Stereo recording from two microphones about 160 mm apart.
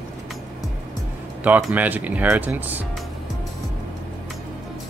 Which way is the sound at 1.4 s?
5° right (ahead or behind).